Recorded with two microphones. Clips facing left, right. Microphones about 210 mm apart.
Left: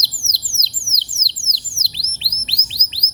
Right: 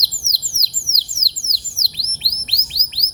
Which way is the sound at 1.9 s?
25° left (ahead or behind).